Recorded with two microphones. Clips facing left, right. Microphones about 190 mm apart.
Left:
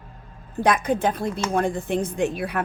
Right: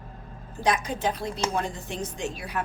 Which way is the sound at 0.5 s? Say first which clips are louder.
Left 6 dB; 55° left (ahead or behind).